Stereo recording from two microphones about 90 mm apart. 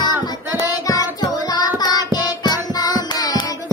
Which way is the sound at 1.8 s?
50° left (ahead or behind).